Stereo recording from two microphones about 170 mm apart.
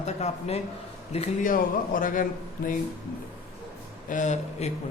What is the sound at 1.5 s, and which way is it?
Speech, 55° left (ahead or behind).